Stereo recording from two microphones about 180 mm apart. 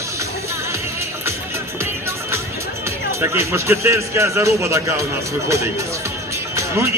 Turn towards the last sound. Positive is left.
turn(degrees=-15)  # may be behind; listen again after turning